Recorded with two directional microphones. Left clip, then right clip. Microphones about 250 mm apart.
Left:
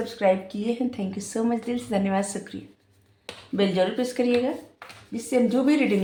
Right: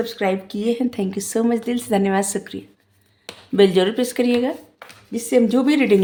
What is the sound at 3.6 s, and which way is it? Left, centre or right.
Speech, right.